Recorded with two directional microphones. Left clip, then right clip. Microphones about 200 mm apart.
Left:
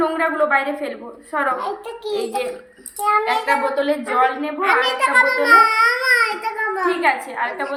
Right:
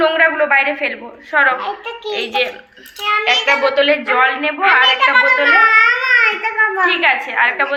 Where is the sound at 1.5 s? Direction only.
80° left.